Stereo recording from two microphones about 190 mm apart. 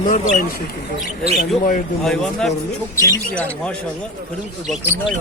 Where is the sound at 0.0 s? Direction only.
45° left (ahead or behind).